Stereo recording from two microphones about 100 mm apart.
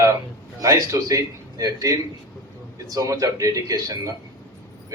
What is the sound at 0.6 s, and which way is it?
Speech, 35° right (ahead or behind).